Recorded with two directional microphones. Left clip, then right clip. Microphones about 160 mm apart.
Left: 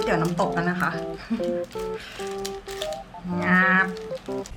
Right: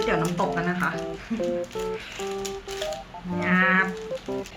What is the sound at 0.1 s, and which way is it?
Music, 45° left (ahead or behind).